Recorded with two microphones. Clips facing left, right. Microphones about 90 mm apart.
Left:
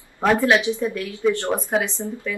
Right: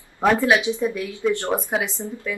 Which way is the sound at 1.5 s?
5° right (ahead or behind).